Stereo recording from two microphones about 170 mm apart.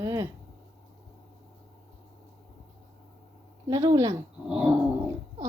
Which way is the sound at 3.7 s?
20° right (ahead or behind).